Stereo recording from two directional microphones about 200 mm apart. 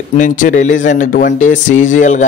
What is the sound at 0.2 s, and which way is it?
Speech, 40° left (ahead or behind).